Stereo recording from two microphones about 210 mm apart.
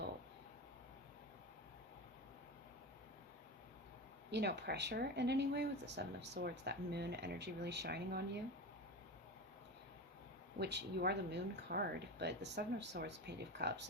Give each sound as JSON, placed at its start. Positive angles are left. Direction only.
{"t": 4.3, "sound": "speech", "side_deg": -50}
{"t": 10.6, "sound": "speech", "side_deg": -55}